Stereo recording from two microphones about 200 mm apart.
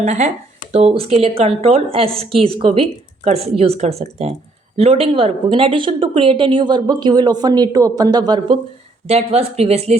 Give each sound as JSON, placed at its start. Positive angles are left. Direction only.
{"t": 0.0, "sound": "speech", "side_deg": -35}
{"t": 9.0, "sound": "speech", "side_deg": -30}